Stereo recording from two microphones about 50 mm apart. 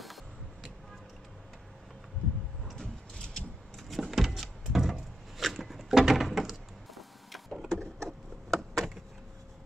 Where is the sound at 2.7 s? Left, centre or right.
Centre.